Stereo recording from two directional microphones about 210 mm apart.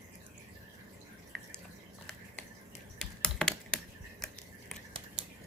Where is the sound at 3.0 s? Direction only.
Centre (ahead or behind).